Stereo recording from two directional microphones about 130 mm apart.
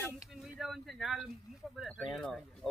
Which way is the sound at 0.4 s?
Centre (ahead or behind).